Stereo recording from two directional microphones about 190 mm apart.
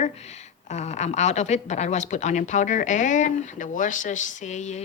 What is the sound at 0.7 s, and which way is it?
Speech, 35° left (ahead or behind).